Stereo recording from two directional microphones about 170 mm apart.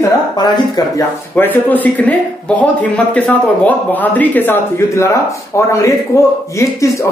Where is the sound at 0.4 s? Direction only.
20° left (ahead or behind).